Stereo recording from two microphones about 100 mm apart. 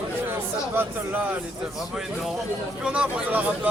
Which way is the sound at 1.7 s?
5° right (ahead or behind).